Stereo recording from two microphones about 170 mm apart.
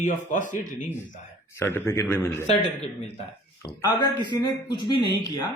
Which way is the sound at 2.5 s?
40° left (ahead or behind).